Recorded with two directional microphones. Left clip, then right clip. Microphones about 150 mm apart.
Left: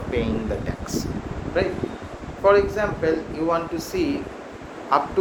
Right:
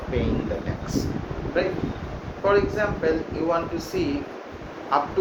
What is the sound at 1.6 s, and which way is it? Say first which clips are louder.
Speech: left 1 dB; 90° left.